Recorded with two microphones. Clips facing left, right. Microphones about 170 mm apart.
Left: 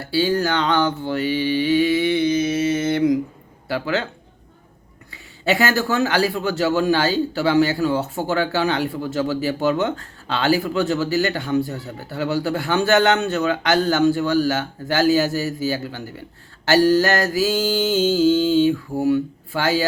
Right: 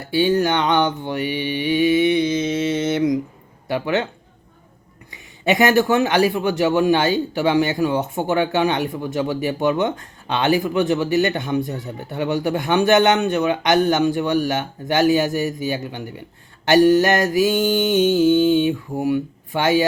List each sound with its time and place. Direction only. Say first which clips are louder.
0.0 s mantra: right 2 dB; 20° right (ahead or behind)
2.8 s a sound: left 1 dB; 20° right (ahead or behind)
3.7 s mantra: right 2 dB; 20° right (ahead or behind)
5.1 s a man's voice: right 2 dB; 20° right (ahead or behind)
16.6 s mantra: right 2 dB; 15° right (ahead or behind)